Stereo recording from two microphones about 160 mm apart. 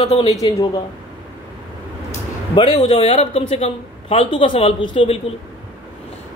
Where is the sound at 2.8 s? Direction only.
35° left (ahead or behind).